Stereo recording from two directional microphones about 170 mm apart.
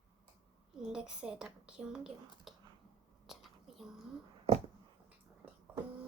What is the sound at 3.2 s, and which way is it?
Whispering, centre (ahead or behind).